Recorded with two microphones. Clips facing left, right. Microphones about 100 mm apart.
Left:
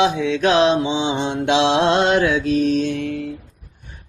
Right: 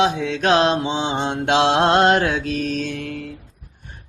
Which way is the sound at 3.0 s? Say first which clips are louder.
Left 5 dB; 45° right (ahead or behind).